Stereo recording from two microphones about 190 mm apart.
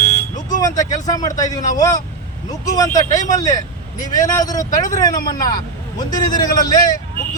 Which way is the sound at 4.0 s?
20° left (ahead or behind).